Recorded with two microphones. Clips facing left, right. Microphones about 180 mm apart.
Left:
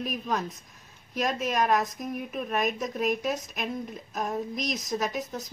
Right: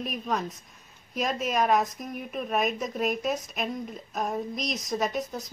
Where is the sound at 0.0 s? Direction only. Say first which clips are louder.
Even; centre (ahead or behind).